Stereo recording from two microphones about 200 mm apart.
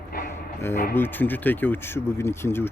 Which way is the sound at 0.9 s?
10° left (ahead or behind).